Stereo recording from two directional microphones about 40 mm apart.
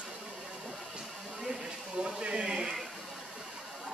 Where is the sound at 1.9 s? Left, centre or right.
Right.